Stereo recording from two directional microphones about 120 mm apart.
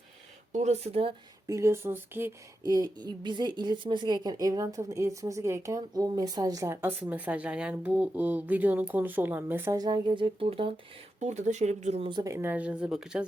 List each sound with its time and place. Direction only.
0.5 s speech: 70° right (ahead or behind)
1.5 s speech: 25° right (ahead or behind)
2.6 s a woman's voice: 30° right (ahead or behind)
7.0 s speech: 15° right (ahead or behind)
9.7 s a woman's voice: 35° right (ahead or behind)
10.4 s speech: 55° right (ahead or behind)
11.2 s speech: 75° right (ahead or behind)
12.2 s speech: 20° right (ahead or behind); by 13.2 s 5° right (ahead or behind)